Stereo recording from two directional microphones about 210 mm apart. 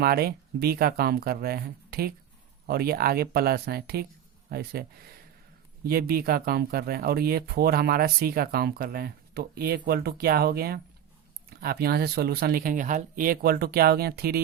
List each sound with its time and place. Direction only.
0.0 s speech: 45° right (ahead or behind)